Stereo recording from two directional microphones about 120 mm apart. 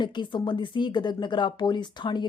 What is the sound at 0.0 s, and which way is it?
Speech, 40° left (ahead or behind).